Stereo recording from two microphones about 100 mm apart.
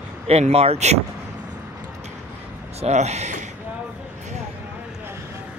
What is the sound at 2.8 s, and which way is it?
Speech, 90° right.